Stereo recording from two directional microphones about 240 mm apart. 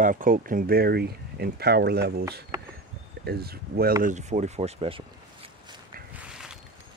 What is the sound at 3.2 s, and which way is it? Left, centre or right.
Speech, right.